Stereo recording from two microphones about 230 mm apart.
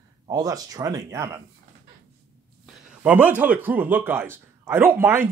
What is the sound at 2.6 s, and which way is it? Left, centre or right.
A man's voice, centre.